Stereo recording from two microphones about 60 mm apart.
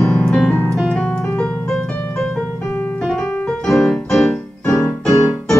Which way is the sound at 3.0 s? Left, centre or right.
Centre.